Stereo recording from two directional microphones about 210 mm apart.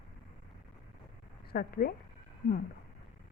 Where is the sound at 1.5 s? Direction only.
45° left (ahead or behind).